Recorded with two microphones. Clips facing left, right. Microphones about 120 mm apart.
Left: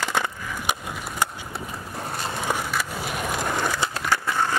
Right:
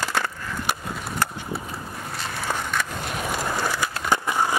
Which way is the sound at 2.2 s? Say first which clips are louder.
Left 1 dB; 20° left (ahead or behind).